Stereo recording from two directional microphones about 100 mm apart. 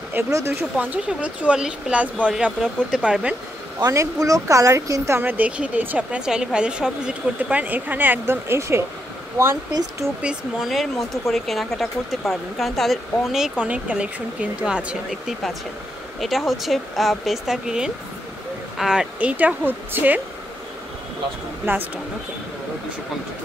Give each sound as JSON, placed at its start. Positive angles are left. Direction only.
{"t": 0.3, "sound": "speech", "side_deg": -30}
{"t": 0.7, "sound": "speech", "side_deg": -15}
{"t": 3.8, "sound": "speech", "side_deg": -35}
{"t": 9.7, "sound": "speech", "side_deg": -40}
{"t": 10.2, "sound": "speech", "side_deg": 0}
{"t": 21.6, "sound": "speech", "side_deg": -20}